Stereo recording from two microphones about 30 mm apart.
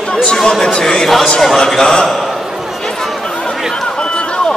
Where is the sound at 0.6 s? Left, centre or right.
Centre.